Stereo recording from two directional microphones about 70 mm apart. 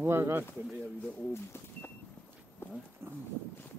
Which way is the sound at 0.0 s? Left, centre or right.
Right.